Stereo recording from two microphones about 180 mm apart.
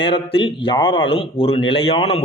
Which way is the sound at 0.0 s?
30° left (ahead or behind).